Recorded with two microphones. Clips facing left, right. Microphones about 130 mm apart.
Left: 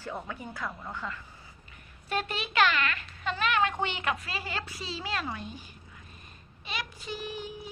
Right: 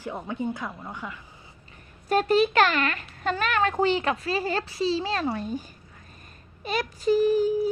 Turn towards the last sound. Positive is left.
turn(degrees=-40)  # may be behind; listen again after turning